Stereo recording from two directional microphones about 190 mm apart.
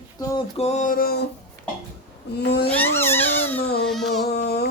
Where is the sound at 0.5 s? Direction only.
35° left (ahead or behind); by 1.2 s 50° left (ahead or behind).